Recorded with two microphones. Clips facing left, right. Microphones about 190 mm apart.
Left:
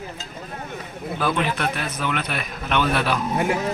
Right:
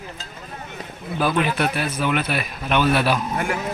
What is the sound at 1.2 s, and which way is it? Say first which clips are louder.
A man's voice: right 3 dB; 10° right (ahead or behind).